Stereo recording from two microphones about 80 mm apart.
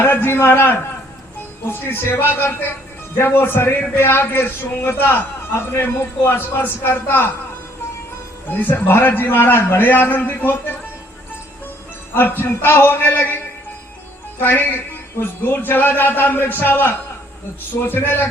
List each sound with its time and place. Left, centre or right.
0.0 s a man's voice: left
1.9 s a man's voice: left
8.4 s a man's voice: left
12.1 s a man's voice: left